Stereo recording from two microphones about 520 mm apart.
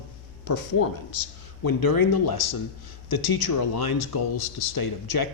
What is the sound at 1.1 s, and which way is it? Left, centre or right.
A man's voice, left.